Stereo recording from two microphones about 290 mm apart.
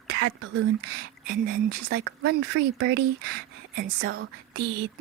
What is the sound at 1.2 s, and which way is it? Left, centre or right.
Speech, right.